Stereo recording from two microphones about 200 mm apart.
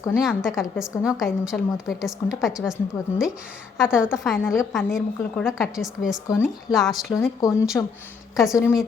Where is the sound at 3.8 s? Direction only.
5° right (ahead or behind).